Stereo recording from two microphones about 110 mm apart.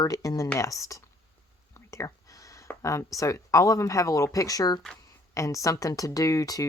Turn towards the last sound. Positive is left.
turn(degrees=30)  # may be behind; listen again after turning